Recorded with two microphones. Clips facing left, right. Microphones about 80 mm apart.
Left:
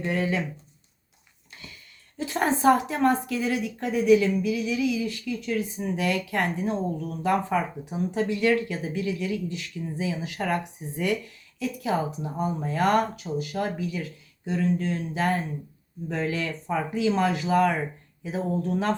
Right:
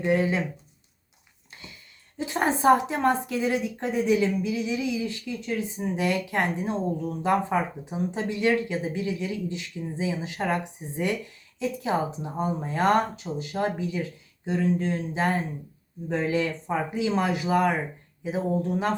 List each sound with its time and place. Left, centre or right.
0.0 s a woman's voice: right
1.6 s a sound: right
2.1 s a woman's voice: right